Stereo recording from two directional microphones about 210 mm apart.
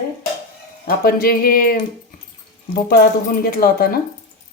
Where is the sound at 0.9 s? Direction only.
45° left (ahead or behind).